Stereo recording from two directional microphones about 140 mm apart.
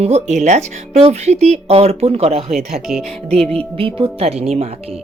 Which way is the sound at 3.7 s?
40° right (ahead or behind).